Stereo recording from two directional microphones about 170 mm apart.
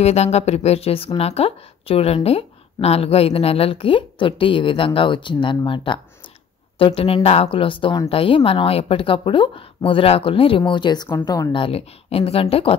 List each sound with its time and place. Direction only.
0.0 s a woman's voice: 40° left (ahead or behind)